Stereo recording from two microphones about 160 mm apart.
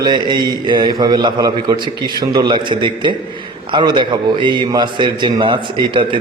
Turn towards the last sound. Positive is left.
turn(degrees=-30)  # may be behind; listen again after turning